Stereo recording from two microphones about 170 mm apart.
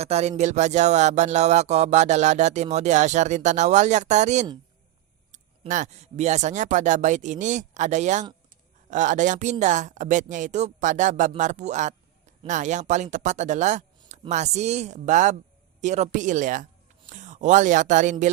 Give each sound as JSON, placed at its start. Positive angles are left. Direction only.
{"t": 0.0, "sound": "speech", "side_deg": -40}